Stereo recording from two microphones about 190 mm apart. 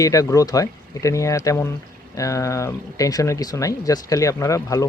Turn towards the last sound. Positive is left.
turn(degrees=15)  # may be behind; listen again after turning